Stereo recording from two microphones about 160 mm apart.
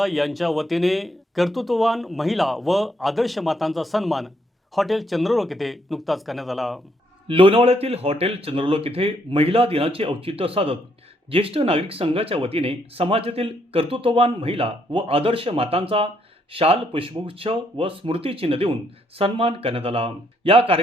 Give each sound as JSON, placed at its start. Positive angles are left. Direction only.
{"t": 0.0, "sound": "speech", "side_deg": 0}
{"t": 7.3, "sound": "speech", "side_deg": -35}